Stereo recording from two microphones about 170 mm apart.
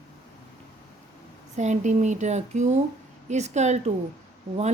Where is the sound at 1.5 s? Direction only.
45° right (ahead or behind).